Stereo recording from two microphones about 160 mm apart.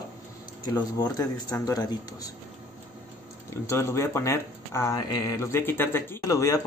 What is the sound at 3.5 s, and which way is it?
Speech, 20° left (ahead or behind).